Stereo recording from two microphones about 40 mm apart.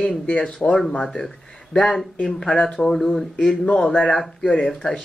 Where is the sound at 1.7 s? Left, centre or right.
Centre.